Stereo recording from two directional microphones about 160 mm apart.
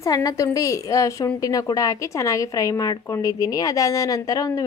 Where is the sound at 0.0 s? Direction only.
25° left (ahead or behind).